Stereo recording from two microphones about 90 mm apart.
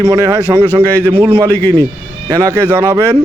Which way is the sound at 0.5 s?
35° right (ahead or behind).